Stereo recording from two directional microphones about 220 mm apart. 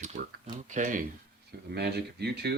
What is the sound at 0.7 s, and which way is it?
Speech, 35° right (ahead or behind).